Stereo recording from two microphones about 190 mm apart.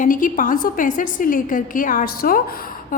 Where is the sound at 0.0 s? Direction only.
45° left (ahead or behind).